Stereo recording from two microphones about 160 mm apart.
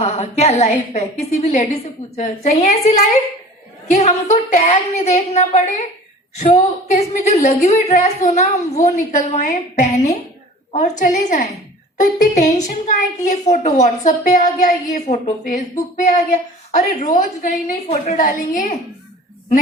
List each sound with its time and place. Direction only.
0.0 s a woman's voice: 40° left (ahead or behind)
17.8 s a woman's voice: 45° left (ahead or behind)